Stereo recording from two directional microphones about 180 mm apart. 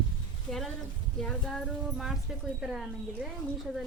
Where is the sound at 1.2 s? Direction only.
5° left (ahead or behind).